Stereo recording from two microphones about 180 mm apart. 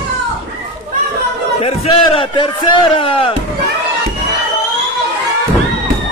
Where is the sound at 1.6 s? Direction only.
30° left (ahead or behind).